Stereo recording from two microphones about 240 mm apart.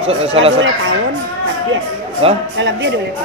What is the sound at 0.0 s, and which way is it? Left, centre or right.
Speech, right.